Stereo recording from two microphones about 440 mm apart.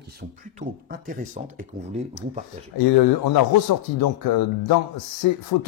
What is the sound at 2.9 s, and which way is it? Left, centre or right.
Speech, left.